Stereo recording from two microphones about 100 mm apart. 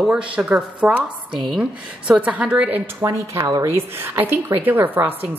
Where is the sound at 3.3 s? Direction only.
40° right (ahead or behind).